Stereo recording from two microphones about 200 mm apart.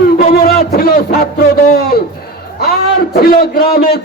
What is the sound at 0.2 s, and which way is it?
Music, 50° left (ahead or behind).